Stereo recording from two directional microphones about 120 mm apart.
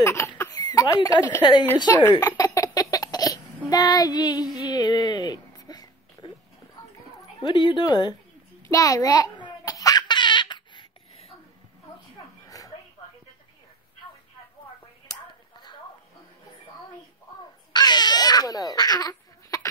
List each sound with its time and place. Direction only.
0.0 s speech: 25° left (ahead or behind)
1.4 s speech: 40° left (ahead or behind)
2.0 s laughter: 30° left (ahead or behind)
4.6 s a sound: 35° left (ahead or behind)
7.2 s speech: 35° left (ahead or behind)
8.6 s baby laughter: 30° left (ahead or behind); by 11.3 s 50° left (ahead or behind)
12.4 s a sound: 30° left (ahead or behind)
17.7 s baby cry: 35° left (ahead or behind)